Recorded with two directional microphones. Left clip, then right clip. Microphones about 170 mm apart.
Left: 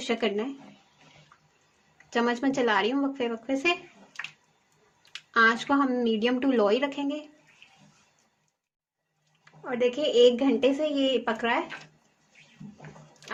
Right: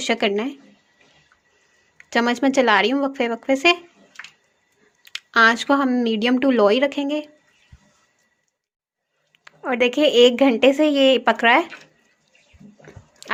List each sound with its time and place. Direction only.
0.0 s speech: 60° right (ahead or behind)
2.0 s speech: 60° right (ahead or behind)
5.0 s speech: 60° right (ahead or behind)
9.4 s speech: 60° right (ahead or behind)